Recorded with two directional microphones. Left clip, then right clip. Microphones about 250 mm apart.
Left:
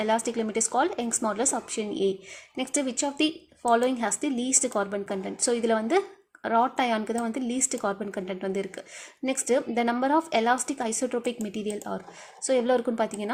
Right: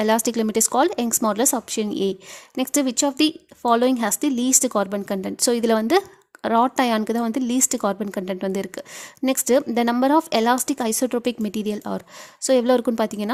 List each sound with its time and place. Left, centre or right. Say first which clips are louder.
0.0 s a woman's voice: right 6 dB; right
11.8 s speech: right 5 dB; right
12.5 s a woman's voice: right 6 dB; right